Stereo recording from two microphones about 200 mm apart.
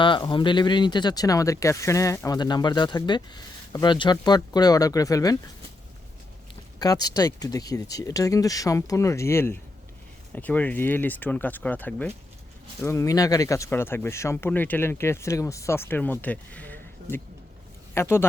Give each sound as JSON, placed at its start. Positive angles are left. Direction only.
{"t": 0.0, "sound": "speech", "side_deg": 25}
{"t": 6.7, "sound": "speech", "side_deg": 20}
{"t": 16.2, "sound": "a sound", "side_deg": 5}
{"t": 17.9, "sound": "speech", "side_deg": 10}